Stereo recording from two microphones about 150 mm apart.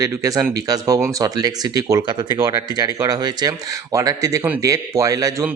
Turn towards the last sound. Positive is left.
turn(degrees=-20)  # may be behind; listen again after turning